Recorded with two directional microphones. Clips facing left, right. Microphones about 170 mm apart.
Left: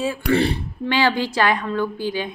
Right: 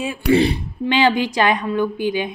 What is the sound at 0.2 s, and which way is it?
Speech, 15° right (ahead or behind).